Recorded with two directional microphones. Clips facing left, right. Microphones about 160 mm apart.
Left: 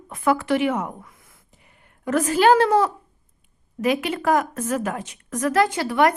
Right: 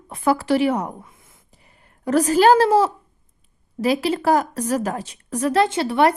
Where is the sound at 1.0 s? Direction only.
25° right (ahead or behind).